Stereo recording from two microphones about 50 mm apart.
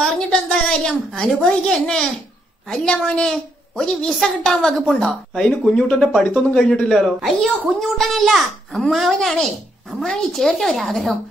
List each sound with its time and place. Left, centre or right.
0.0 s a woman's voice: centre